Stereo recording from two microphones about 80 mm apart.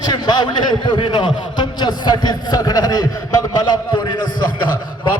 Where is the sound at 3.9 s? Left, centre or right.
Left.